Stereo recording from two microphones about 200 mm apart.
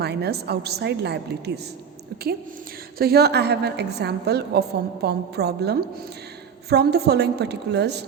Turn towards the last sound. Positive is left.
turn(degrees=-55)  # may be behind; listen again after turning